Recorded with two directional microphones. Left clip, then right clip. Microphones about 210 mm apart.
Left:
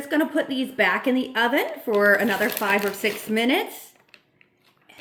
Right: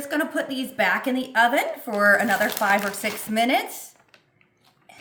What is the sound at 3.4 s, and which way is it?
Speech, 45° right (ahead or behind).